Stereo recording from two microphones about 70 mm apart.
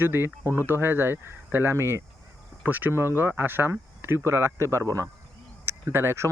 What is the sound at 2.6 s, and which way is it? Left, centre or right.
Speech, right.